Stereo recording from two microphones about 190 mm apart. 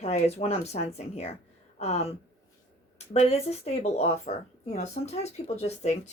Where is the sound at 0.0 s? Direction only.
35° left (ahead or behind).